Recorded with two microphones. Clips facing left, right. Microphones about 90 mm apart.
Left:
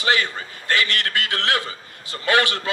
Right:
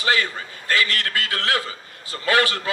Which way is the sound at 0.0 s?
25° left (ahead or behind).